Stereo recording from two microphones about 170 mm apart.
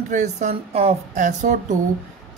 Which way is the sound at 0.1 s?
45° right (ahead or behind).